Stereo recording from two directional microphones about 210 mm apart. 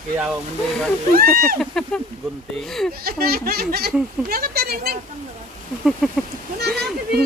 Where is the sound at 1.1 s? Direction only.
45° right (ahead or behind).